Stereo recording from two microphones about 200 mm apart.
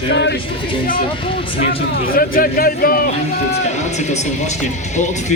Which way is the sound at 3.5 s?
35° left (ahead or behind).